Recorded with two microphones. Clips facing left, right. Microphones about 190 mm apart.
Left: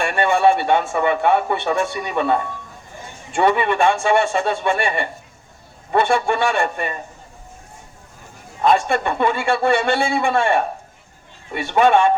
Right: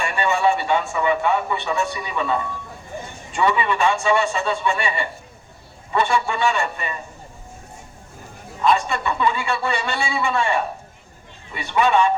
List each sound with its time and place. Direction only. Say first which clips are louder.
0.0 s a man's voice: left 4 dB; 55° left (ahead or behind)
8.6 s a man's voice: left 3 dB; 50° left (ahead or behind)